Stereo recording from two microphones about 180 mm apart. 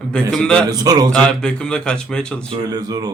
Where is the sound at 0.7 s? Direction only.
20° right (ahead or behind).